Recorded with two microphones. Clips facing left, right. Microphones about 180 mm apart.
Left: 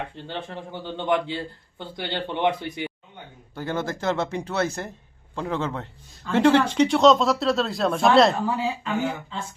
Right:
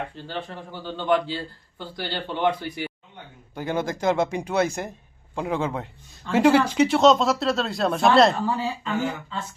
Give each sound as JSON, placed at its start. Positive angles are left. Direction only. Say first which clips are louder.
{"t": 0.2, "sound": "a man's voice", "louder": "even", "side_deg": 20}
{"t": 3.5, "sound": "speech", "louder": "right 1 dB", "side_deg": -15}